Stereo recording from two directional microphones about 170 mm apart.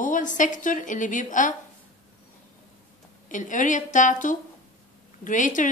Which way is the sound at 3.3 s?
50° left (ahead or behind).